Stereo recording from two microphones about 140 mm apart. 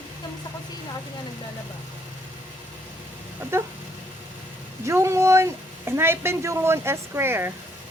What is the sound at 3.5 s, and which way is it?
Speech, 15° right (ahead or behind).